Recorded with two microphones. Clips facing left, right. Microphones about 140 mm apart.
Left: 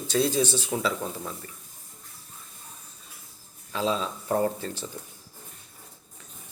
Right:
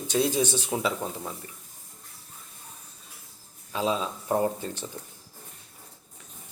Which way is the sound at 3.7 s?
15° right (ahead or behind).